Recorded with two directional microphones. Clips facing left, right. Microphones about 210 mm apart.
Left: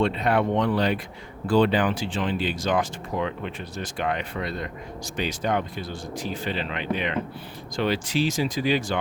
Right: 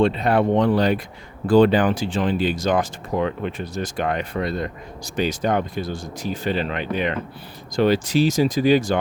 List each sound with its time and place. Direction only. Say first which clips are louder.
0.0 s speech: right 4 dB; 35° right (ahead or behind)